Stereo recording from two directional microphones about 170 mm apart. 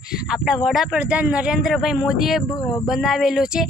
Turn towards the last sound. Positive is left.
turn(degrees=-5)  # may be behind; listen again after turning